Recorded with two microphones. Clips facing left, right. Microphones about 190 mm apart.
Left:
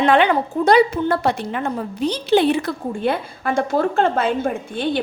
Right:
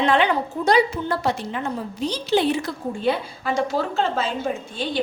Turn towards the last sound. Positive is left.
turn(degrees=55)  # may be behind; listen again after turning